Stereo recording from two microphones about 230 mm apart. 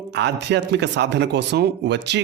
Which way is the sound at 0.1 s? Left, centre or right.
Right.